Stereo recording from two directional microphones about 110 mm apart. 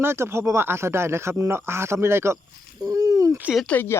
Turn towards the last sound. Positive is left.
turn(degrees=15)  # may be behind; listen again after turning